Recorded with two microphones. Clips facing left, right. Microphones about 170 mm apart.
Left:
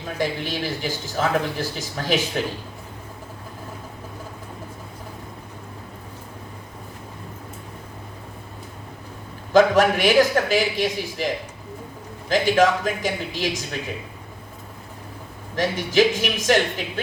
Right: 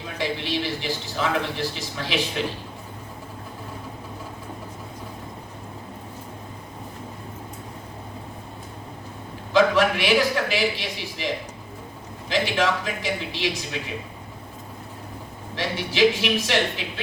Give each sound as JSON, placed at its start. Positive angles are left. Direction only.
{"t": 0.2, "sound": "a man's voice", "side_deg": 45}
{"t": 9.5, "sound": "a man's voice", "side_deg": 45}
{"t": 12.3, "sound": "a man's voice", "side_deg": 45}
{"t": 15.5, "sound": "a man's voice", "side_deg": 45}